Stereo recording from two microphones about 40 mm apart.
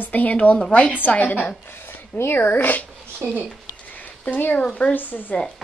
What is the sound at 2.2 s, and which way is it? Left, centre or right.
Speech, left.